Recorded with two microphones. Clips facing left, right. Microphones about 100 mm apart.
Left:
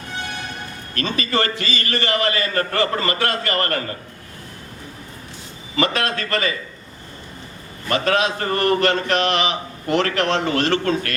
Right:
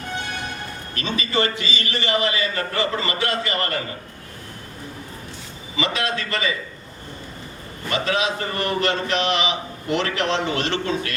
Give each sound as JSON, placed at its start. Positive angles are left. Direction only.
{"t": 0.9, "sound": "a man's voice", "side_deg": 50}
{"t": 5.7, "sound": "a man's voice", "side_deg": 50}
{"t": 7.9, "sound": "a man's voice", "side_deg": 50}